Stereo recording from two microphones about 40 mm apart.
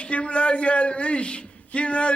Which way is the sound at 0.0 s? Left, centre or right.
Left.